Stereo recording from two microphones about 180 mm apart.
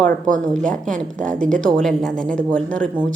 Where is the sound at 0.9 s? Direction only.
5° left (ahead or behind).